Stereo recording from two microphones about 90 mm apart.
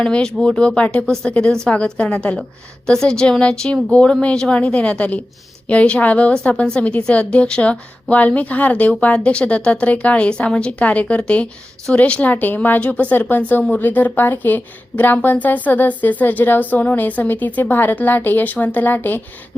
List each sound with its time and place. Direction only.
0.0 s a woman's voice: 10° left (ahead or behind)